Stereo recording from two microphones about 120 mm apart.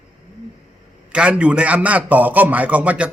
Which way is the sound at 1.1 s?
10° right (ahead or behind).